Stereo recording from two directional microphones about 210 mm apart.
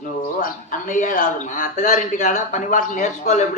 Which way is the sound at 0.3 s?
40° left (ahead or behind).